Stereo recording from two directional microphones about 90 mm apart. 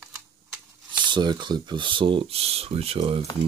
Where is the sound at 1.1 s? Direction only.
60° right (ahead or behind).